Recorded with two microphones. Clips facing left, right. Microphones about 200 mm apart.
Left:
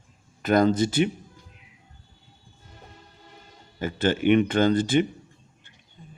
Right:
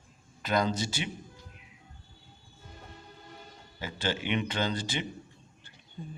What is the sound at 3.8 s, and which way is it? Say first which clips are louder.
A man's voice: left 10 dB; 55° left (ahead or behind).